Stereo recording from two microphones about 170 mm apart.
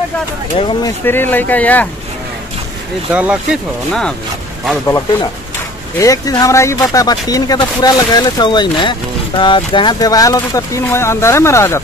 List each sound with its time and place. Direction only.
0.6 s speech: 30° left (ahead or behind)
1.0 s speech: 10° left (ahead or behind)
3.1 s speech: 10° right (ahead or behind)
4.8 s speech: 15° left (ahead or behind)